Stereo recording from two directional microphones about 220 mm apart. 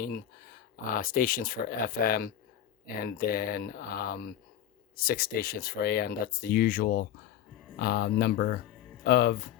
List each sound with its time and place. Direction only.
0.0 s speech: 40° left (ahead or behind)